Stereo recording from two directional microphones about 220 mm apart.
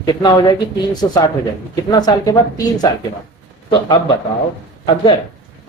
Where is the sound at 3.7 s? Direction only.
25° left (ahead or behind).